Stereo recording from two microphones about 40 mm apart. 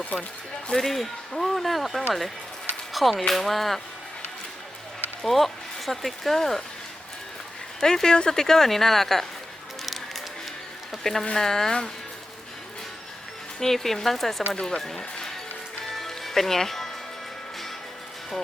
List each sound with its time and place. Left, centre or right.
0.0 s speech: left
0.7 s speech: centre
5.2 s speech: centre
7.8 s speech: centre
10.9 s speech: centre
13.6 s speech: centre
15.8 s music: centre